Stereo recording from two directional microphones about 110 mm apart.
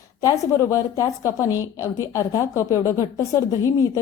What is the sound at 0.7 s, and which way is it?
A woman's voice, 30° left (ahead or behind).